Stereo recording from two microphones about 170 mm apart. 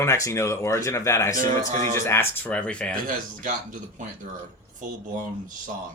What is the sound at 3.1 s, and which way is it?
Speech, 50° right (ahead or behind).